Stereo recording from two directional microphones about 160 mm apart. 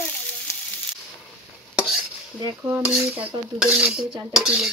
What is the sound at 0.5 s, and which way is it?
Sizzle, 20° left (ahead or behind).